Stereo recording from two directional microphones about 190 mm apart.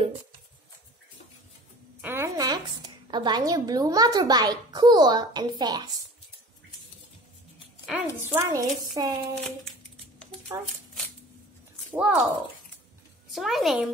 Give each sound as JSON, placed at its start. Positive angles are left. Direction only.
{"t": 2.0, "sound": "a woman's voice", "side_deg": -10}
{"t": 7.8, "sound": "a child's voice", "side_deg": -10}
{"t": 10.5, "sound": "a child's voice", "side_deg": -15}
{"t": 11.9, "sound": "speech", "side_deg": -5}
{"t": 13.3, "sound": "speech", "side_deg": 0}